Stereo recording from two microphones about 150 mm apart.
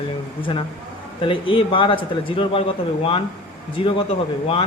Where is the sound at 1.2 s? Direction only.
35° left (ahead or behind).